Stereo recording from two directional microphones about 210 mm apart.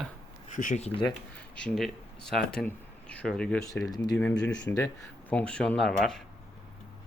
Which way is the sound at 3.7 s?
15° left (ahead or behind).